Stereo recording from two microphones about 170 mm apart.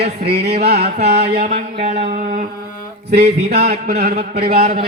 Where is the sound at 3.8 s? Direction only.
70° right (ahead or behind).